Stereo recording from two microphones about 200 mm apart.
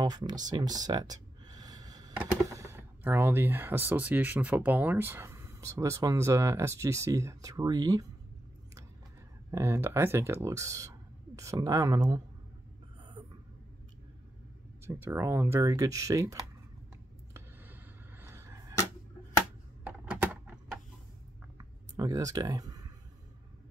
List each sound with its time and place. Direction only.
0.0 s speech: 20° right (ahead or behind)
0.5 s a sound: 20° right (ahead or behind)
2.1 s speech: 15° right (ahead or behind)
9.5 s speech: 15° right (ahead or behind)
14.9 s speech: 10° right (ahead or behind)
17.3 s arrow: 10° right (ahead or behind)
19.8 s computer keyboard: 10° right (ahead or behind)
21.5 s a sound: 20° right (ahead or behind)